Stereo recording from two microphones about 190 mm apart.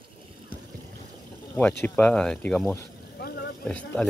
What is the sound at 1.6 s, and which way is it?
Speech, 10° left (ahead or behind).